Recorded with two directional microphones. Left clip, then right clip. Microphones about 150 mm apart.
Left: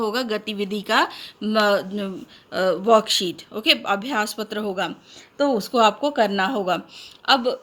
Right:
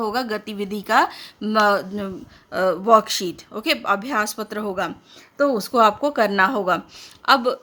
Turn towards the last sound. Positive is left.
turn(degrees=-40)  # may be behind; listen again after turning